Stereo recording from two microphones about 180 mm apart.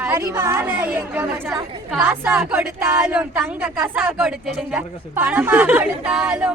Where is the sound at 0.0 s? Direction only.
15° right (ahead or behind).